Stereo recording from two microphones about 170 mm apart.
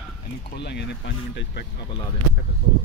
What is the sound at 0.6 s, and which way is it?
Speech, 90° left.